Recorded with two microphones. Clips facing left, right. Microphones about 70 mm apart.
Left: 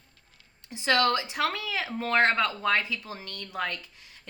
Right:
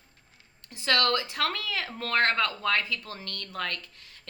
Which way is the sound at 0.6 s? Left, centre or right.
Centre.